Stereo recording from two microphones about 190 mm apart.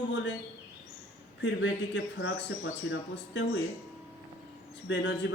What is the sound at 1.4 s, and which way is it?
Speech, 65° left (ahead or behind).